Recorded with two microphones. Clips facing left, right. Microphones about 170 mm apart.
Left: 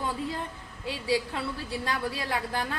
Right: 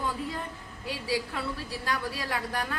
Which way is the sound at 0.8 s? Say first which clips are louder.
Left 3 dB; 25° left (ahead or behind).